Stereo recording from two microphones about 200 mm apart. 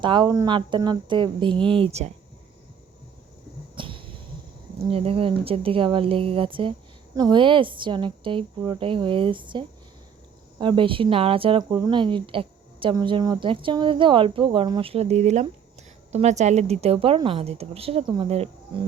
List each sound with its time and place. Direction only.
0.0 s speech: 20° right (ahead or behind)
3.8 s a sound: 25° right (ahead or behind)
4.9 s a woman's voice: 30° right (ahead or behind)